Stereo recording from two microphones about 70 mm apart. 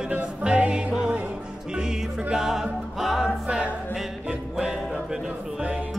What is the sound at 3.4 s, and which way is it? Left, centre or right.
Music, centre.